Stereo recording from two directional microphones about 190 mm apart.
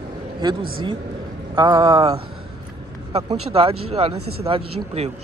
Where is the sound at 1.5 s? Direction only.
25° right (ahead or behind).